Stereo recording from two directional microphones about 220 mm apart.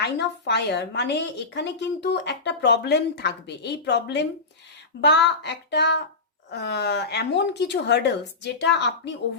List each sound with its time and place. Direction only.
0.0 s speech: 50° left (ahead or behind)